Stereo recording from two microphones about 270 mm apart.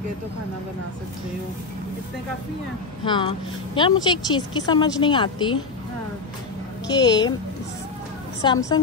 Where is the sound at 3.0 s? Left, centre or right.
Centre.